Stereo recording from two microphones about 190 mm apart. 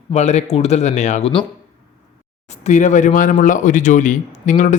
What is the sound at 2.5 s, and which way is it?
Speech, 40° left (ahead or behind).